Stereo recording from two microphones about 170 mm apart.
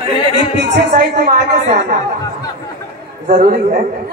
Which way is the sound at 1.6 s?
40° right (ahead or behind).